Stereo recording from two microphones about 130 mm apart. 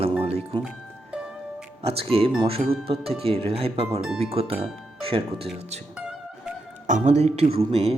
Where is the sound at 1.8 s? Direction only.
45° right (ahead or behind).